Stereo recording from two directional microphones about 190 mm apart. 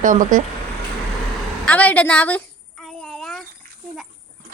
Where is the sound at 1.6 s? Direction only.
10° left (ahead or behind).